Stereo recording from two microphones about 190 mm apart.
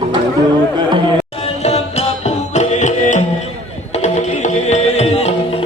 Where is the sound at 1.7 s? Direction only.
35° left (ahead or behind).